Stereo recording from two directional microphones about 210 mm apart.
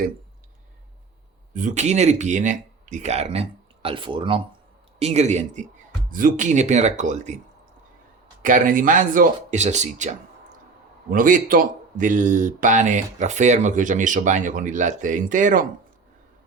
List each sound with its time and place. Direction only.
1.5 s speech: 35° right (ahead or behind)
8.4 s speech: 40° right (ahead or behind)